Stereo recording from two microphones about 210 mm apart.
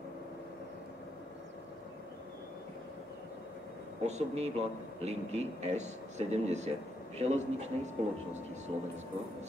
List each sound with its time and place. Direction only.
4.0 s a man's voice: 30° right (ahead or behind)